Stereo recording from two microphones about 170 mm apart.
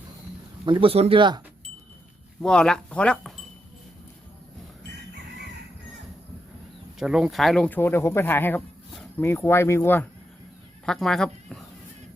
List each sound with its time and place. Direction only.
0.6 s speech: 30° right (ahead or behind)
2.4 s speech: 5° left (ahead or behind)
7.0 s speech: 5° right (ahead or behind); by 10.1 s 15° left (ahead or behind)
10.8 s speech: 5° left (ahead or behind)